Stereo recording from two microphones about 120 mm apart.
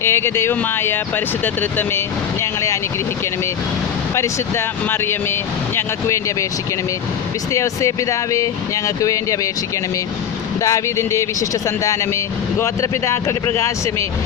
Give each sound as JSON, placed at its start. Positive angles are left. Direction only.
{"t": 0.0, "sound": "speech", "side_deg": 25}
{"t": 2.4, "sound": "vehicle", "side_deg": 25}
{"t": 4.1, "sound": "speech", "side_deg": 20}
{"t": 7.5, "sound": "speech", "side_deg": 25}
{"t": 10.6, "sound": "speech", "side_deg": 25}